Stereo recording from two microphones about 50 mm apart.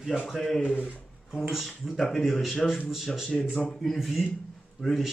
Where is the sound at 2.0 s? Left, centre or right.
Centre.